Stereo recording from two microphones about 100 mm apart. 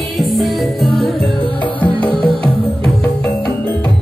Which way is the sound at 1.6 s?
15° left (ahead or behind).